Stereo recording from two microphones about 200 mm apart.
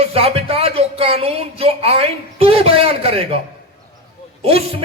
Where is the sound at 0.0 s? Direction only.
30° right (ahead or behind).